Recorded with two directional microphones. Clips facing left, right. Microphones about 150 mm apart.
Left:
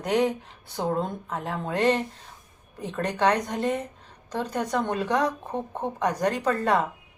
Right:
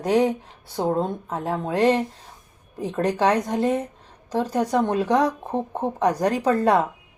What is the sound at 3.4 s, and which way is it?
Speech, 30° right (ahead or behind).